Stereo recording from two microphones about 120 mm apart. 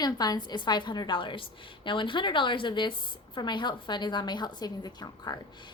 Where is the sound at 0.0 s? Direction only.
35° left (ahead or behind).